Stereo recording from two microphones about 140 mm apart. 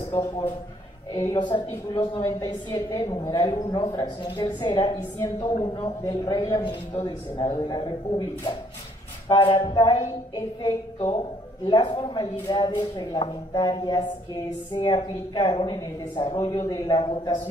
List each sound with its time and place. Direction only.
1.1 s a woman's voice: 20° left (ahead or behind); by 17.4 s 35° left (ahead or behind)